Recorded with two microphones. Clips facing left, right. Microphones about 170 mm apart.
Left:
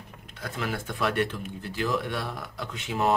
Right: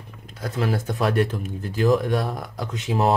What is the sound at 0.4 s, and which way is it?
A man's voice, 35° right (ahead or behind).